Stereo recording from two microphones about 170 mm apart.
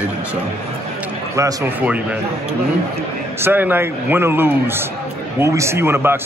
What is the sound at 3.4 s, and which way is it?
A man's voice, 10° right (ahead or behind).